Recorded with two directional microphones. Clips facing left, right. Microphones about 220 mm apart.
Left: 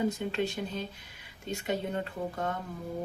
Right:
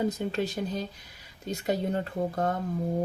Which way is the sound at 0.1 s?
40° right (ahead or behind).